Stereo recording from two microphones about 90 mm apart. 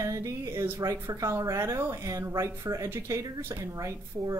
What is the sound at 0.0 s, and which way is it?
Speech, 35° right (ahead or behind).